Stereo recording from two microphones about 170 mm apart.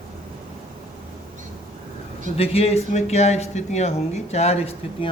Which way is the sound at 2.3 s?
35° left (ahead or behind).